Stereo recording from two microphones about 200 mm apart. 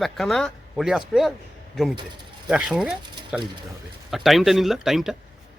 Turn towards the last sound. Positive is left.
turn(degrees=0)  # may be behind; listen again after turning